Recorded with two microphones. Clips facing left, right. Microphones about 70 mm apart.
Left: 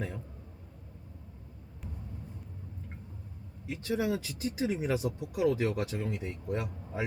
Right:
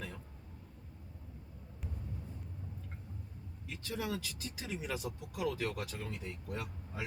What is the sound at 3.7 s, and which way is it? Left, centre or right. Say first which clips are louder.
Speech: left 8 dB; left.